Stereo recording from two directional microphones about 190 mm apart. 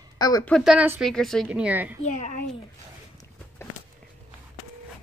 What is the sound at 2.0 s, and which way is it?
Speech, 40° left (ahead or behind).